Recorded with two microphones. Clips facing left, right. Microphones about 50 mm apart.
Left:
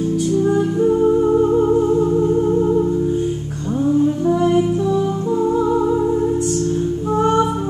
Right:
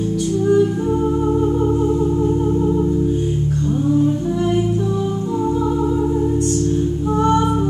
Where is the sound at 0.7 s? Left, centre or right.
Centre.